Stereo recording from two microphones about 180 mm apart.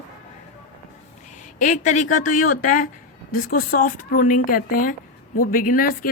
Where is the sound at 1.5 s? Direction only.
45° left (ahead or behind).